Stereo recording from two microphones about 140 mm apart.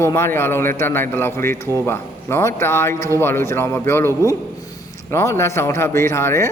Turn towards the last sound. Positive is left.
turn(degrees=20)  # may be behind; listen again after turning